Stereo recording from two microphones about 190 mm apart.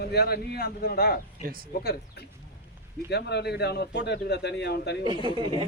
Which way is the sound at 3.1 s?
60° left (ahead or behind).